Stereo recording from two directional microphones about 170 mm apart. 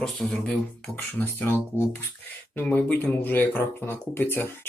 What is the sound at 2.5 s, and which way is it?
Speech, 10° left (ahead or behind).